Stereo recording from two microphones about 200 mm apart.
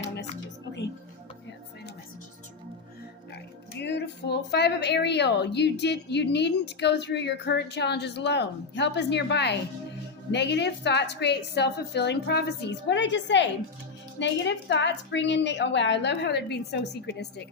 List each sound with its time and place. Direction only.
3.3 s speech: 55° left (ahead or behind)